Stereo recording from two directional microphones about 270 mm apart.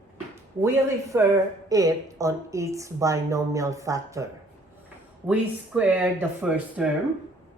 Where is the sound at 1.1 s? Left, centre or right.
Centre.